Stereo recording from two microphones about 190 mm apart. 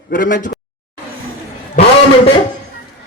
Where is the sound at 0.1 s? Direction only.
45° left (ahead or behind).